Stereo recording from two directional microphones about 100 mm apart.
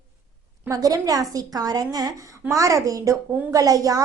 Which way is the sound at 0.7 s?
35° right (ahead or behind).